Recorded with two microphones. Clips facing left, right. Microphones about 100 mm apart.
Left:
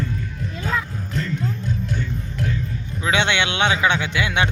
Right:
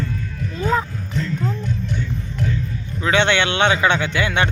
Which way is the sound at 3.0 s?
10° left (ahead or behind).